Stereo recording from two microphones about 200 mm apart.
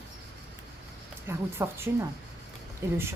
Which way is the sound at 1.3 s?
10° right (ahead or behind).